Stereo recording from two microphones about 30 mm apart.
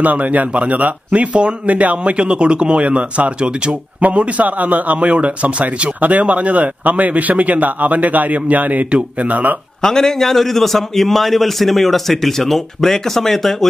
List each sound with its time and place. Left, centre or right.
0.0 s speech: right
0.5 s speech: right
2.1 s a man's voice: right
2.8 s a man's voice: right
4.0 s speech: right
4.5 s speech: right
9.8 s a man's voice: centre